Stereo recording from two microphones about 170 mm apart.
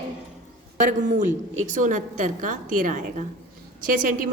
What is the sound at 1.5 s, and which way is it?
A woman's voice, 50° right (ahead or behind).